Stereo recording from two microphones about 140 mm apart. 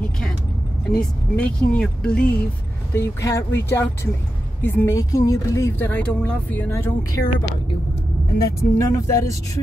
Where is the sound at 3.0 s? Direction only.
20° left (ahead or behind).